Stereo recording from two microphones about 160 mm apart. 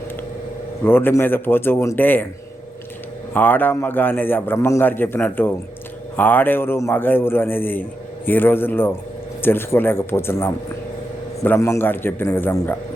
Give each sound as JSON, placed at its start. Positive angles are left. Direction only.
{"t": 0.9, "sound": "a man's voice", "side_deg": 15}
{"t": 3.3, "sound": "a man's voice", "side_deg": 10}